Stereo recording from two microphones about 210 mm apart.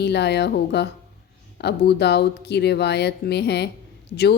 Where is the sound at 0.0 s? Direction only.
55° left (ahead or behind).